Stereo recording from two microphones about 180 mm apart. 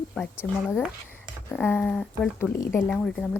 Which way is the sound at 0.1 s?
5° left (ahead or behind).